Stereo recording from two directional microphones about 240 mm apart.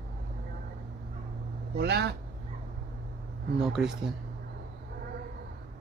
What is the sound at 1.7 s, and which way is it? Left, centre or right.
Speech, right.